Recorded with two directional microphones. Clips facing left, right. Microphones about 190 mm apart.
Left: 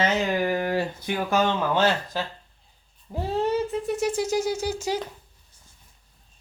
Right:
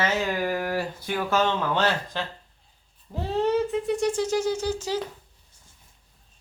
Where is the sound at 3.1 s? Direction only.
5° left (ahead or behind).